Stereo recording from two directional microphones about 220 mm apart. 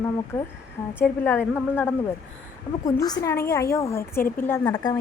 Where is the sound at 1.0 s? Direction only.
10° left (ahead or behind).